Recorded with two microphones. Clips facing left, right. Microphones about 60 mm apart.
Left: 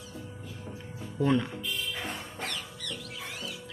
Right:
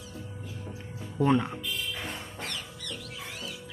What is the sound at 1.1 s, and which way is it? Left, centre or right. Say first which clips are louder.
Speech: right 2 dB; right.